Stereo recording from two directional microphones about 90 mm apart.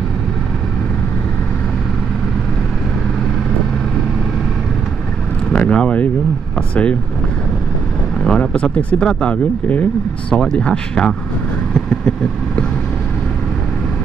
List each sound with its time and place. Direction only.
5.5 s vehicle: 10° left (ahead or behind)
6.7 s speech: 15° left (ahead or behind)
8.2 s speech: 10° left (ahead or behind)